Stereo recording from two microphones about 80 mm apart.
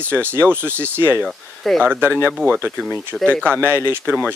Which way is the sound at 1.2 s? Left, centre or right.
Centre.